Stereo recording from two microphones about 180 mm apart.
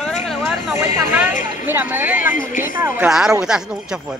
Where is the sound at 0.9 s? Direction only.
10° right (ahead or behind).